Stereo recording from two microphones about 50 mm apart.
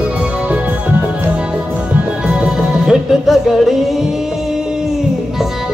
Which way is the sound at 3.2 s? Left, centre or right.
Centre.